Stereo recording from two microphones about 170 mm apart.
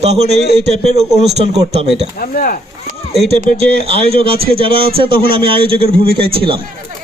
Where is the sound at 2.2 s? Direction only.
55° left (ahead or behind).